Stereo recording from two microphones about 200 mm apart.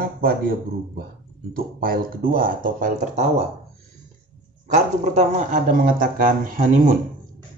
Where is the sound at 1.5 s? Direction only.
45° right (ahead or behind).